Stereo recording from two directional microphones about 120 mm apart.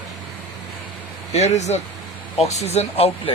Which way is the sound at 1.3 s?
70° left (ahead or behind).